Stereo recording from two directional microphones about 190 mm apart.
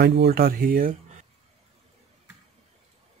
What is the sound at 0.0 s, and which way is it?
Speech, 60° right (ahead or behind).